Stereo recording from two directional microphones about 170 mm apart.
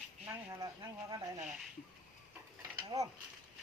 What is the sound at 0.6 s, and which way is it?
Speech, 20° right (ahead or behind).